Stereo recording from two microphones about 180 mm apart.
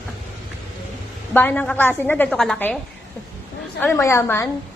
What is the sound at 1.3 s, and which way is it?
A woman's voice, 10° left (ahead or behind).